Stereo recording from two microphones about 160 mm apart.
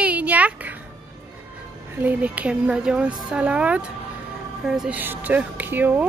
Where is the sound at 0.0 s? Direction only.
10° right (ahead or behind).